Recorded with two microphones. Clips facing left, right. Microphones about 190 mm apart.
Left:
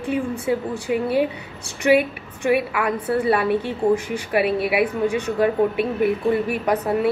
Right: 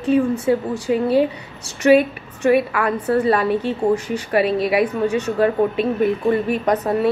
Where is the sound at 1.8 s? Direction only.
15° left (ahead or behind).